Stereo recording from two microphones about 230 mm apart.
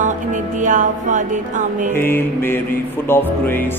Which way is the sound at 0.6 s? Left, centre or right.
Right.